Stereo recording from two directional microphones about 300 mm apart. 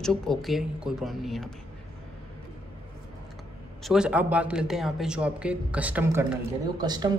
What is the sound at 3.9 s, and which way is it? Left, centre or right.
A man's voice, centre.